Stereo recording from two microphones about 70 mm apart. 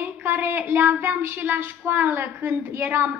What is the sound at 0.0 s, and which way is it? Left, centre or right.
Speech, right.